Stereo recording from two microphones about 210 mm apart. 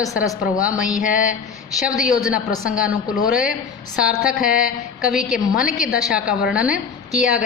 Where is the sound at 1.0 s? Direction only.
40° left (ahead or behind).